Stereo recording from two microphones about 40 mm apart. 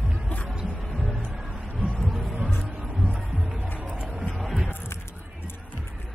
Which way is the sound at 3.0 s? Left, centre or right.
Right.